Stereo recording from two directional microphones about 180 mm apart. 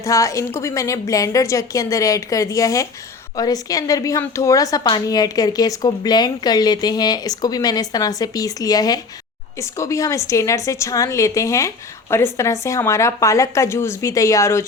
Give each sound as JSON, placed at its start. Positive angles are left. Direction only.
{"t": 0.0, "sound": "a woman's voice", "side_deg": 15}